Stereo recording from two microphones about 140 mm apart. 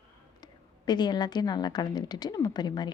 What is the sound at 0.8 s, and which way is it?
A woman's voice, 30° left (ahead or behind).